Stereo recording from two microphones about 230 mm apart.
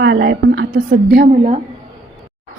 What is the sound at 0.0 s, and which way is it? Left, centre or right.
A woman's voice, right.